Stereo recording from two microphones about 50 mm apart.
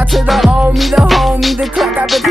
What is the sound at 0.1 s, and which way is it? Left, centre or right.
Music, centre.